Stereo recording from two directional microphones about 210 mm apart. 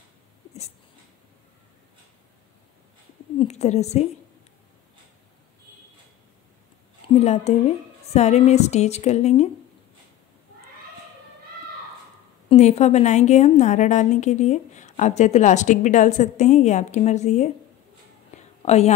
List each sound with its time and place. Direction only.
3.3 s a woman's voice: 30° left (ahead or behind)
7.2 s a woman's voice: 30° left (ahead or behind)
12.4 s a woman's voice: 30° left (ahead or behind)
18.3 s a sound: 30° left (ahead or behind)